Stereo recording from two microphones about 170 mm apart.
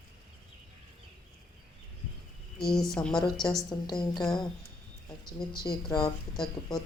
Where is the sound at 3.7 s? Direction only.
25° left (ahead or behind).